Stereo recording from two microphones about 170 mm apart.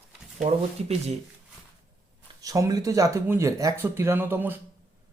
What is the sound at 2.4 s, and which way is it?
Speech, 20° right (ahead or behind).